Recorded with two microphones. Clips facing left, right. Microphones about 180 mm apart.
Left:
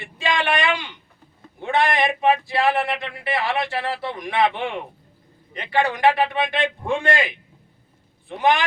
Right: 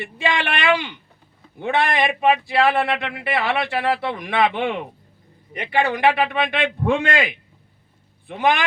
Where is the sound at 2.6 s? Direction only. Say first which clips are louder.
Even; 60° right (ahead or behind).